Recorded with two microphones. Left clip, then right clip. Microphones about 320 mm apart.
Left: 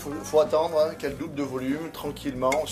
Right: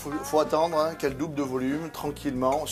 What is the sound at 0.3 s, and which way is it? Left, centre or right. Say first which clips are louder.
Speech: left 2 dB; right.